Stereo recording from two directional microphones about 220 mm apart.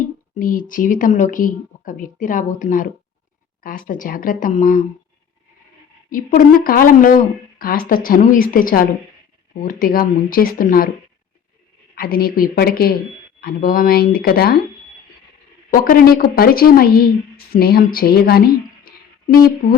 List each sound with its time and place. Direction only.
0.3 s a woman's voice: 40° left (ahead or behind)
6.1 s a woman's voice: 40° left (ahead or behind)
11.9 s a woman's voice: 40° left (ahead or behind)
15.7 s a woman's voice: 40° left (ahead or behind)